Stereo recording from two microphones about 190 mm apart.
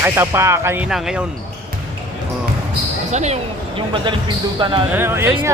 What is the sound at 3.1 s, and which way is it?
Speech, 35° right (ahead or behind).